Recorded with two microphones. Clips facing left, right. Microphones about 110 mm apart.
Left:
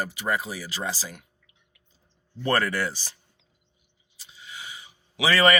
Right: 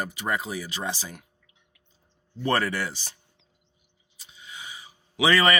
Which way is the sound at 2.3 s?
20° right (ahead or behind).